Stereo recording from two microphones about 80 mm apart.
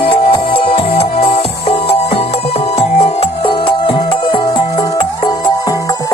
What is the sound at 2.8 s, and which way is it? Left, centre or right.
Music, left.